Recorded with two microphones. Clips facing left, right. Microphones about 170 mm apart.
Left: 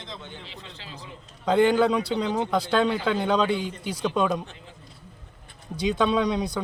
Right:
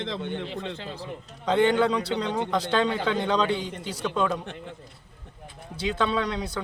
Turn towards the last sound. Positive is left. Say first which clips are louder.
# left 4 dB
turn(degrees=15)  # may be behind; listen again after turning